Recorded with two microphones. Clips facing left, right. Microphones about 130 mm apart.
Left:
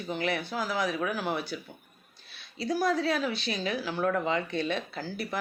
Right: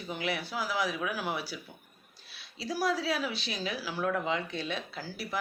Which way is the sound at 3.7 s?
50° left (ahead or behind).